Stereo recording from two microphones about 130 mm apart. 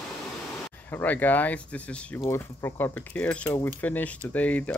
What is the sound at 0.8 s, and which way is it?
Speech, 15° left (ahead or behind).